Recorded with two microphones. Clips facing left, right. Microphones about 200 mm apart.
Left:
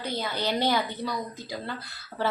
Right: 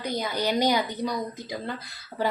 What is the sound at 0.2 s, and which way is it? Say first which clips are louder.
A woman's voice: right 3 dB; 15° right (ahead or behind).